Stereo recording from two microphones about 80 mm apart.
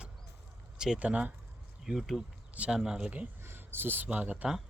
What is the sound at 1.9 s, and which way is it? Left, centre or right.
Speech, centre.